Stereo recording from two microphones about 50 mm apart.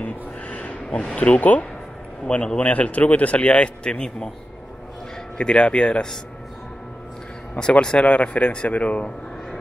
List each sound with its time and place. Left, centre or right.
0.0 s a sound: left
1.1 s speech: left
2.6 s speech: left
5.4 s speech: centre
7.5 s speech: centre